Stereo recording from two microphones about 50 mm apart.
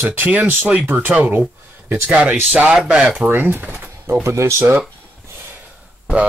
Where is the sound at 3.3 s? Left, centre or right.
Right.